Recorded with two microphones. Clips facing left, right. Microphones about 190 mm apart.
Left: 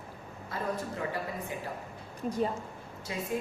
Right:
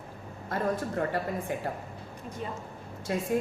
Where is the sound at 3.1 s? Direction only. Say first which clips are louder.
Right 6 dB; 55° right (ahead or behind).